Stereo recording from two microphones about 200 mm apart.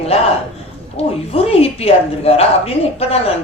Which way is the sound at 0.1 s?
30° left (ahead or behind).